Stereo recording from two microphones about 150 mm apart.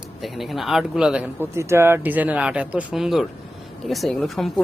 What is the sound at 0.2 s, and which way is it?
Speech, centre (ahead or behind).